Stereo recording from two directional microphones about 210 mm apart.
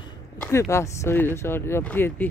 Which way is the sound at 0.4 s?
15° left (ahead or behind).